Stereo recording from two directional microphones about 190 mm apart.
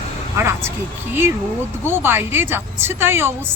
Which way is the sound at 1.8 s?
10° right (ahead or behind).